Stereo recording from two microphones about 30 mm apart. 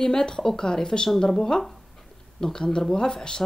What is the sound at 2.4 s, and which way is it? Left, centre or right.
Speech, left.